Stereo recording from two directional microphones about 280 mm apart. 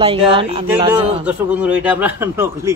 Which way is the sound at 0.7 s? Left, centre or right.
Centre.